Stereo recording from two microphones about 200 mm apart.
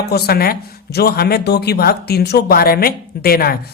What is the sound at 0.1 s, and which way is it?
Speech, 50° left (ahead or behind).